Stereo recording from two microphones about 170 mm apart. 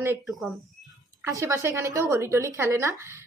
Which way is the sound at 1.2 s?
15° right (ahead or behind).